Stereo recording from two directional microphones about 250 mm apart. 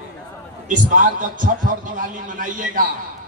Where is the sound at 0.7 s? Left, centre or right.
Right.